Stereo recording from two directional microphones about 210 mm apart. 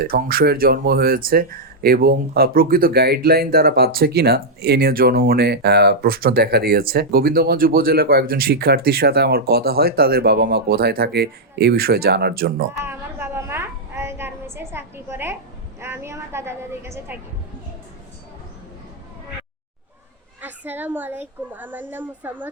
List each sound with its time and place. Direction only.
0.0 s speech: 45° right (ahead or behind)
12.8 s a sound: 10° right (ahead or behind)
15.8 s a woman's voice: 10° right (ahead or behind)
20.4 s a child's voice: 10° right (ahead or behind)